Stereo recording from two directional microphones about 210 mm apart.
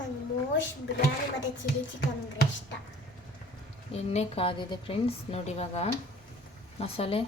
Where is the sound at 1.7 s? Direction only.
45° left (ahead or behind).